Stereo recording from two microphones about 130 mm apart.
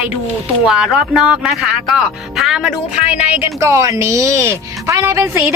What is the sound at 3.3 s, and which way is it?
A woman's voice, 20° right (ahead or behind).